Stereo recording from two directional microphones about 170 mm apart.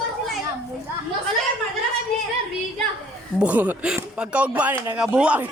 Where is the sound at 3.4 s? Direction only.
10° right (ahead or behind).